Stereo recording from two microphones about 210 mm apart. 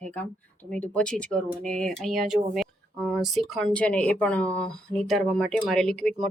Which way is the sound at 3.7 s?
5° left (ahead or behind).